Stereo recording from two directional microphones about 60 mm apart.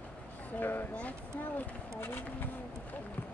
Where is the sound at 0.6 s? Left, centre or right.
Left.